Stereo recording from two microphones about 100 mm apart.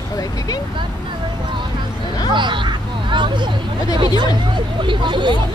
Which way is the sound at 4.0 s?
50° right (ahead or behind).